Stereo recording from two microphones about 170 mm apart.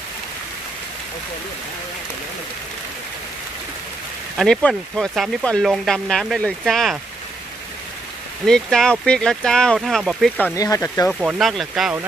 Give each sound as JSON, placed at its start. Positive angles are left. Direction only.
{"t": 4.4, "sound": "speech", "side_deg": 5}
{"t": 8.5, "sound": "speech", "side_deg": 5}
{"t": 10.4, "sound": "speech", "side_deg": 20}
{"t": 11.1, "sound": "speech", "side_deg": -5}